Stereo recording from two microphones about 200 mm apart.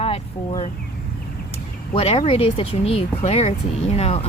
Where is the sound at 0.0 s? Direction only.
30° left (ahead or behind).